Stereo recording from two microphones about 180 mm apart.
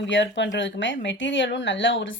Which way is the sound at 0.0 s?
85° left.